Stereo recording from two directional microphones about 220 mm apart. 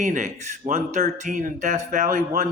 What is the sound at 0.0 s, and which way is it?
Speech, 35° right (ahead or behind).